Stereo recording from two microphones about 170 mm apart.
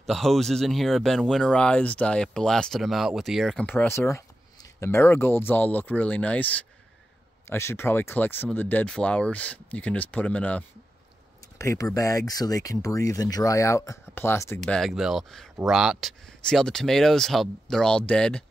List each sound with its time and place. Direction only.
0.0 s speech: centre (ahead or behind)
14.6 s speech: centre (ahead or behind)